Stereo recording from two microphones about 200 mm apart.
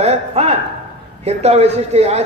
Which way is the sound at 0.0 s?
30° right (ahead or behind).